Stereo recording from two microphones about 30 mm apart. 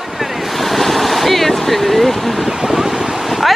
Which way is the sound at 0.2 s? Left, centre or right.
Centre.